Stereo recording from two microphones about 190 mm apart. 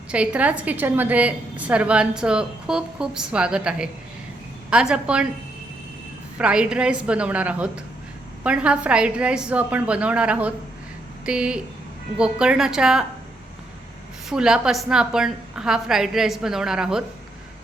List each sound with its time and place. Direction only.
0.1 s a woman's voice: 5° right (ahead or behind)
6.4 s a woman's voice: 5° right (ahead or behind)
14.3 s a woman's voice: 5° right (ahead or behind)